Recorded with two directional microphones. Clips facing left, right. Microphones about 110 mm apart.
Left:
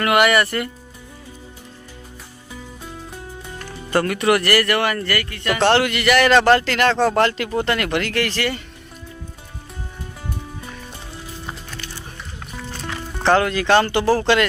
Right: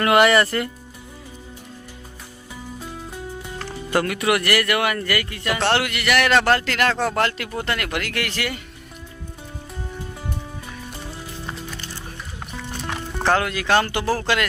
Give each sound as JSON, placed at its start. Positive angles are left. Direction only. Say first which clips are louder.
{"t": 0.0, "sound": "speech", "louder": "right 1 dB", "side_deg": -25}
{"t": 3.9, "sound": "speech", "louder": "left 3 dB", "side_deg": -5}
{"t": 13.1, "sound": "speech", "louder": "left 4 dB", "side_deg": -5}